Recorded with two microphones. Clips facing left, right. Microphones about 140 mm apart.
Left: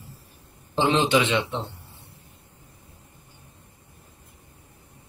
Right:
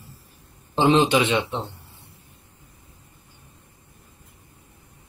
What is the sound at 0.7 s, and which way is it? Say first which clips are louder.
Speech: right 3 dB; 15° right (ahead or behind).